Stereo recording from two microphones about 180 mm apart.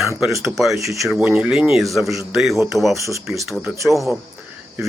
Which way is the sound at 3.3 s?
Centre (ahead or behind).